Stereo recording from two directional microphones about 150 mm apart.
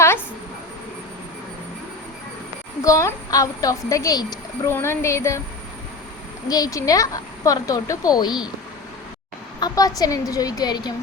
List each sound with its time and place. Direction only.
2.8 s a woman's voice: 20° left (ahead or behind)
6.5 s a woman's voice: 25° left (ahead or behind)
9.6 s a woman's voice: 25° left (ahead or behind)